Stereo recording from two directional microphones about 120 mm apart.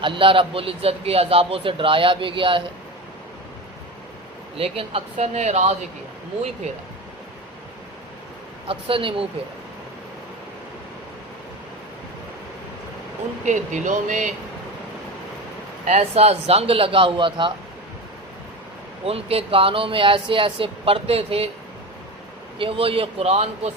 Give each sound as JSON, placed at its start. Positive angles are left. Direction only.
{"t": 0.0, "sound": "a man's voice", "side_deg": -45}
{"t": 4.5, "sound": "a man's voice", "side_deg": -50}
{"t": 5.1, "sound": "speech", "side_deg": -70}
{"t": 8.6, "sound": "a man's voice", "side_deg": -50}
{"t": 13.4, "sound": "speech", "side_deg": -90}
{"t": 15.9, "sound": "a man's voice", "side_deg": -60}
{"t": 19.0, "sound": "a man's voice", "side_deg": -55}
{"t": 22.5, "sound": "a man's voice", "side_deg": -50}